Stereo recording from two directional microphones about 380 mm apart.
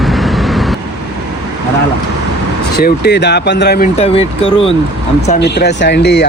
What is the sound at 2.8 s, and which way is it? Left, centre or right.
Speech, left.